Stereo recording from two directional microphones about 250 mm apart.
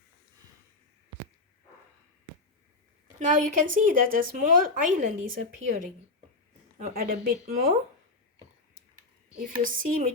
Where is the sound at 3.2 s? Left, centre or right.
Right.